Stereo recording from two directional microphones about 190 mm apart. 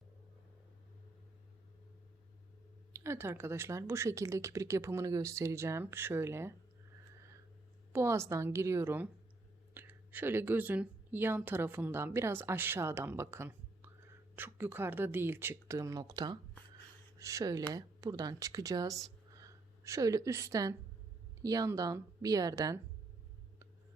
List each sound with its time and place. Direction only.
2.9 s speech: 15° right (ahead or behind)
7.9 s speech: 15° right (ahead or behind)
16.7 s a sound: 15° right (ahead or behind)
17.7 s a woman's voice: 20° right (ahead or behind)